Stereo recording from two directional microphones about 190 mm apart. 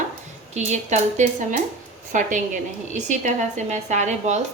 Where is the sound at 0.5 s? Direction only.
40° right (ahead or behind).